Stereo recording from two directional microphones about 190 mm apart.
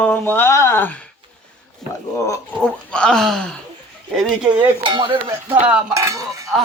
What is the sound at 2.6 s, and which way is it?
A man's voice, 5° left (ahead or behind).